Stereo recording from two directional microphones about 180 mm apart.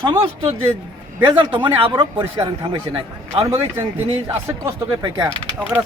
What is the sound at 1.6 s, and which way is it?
A man's voice, 25° right (ahead or behind).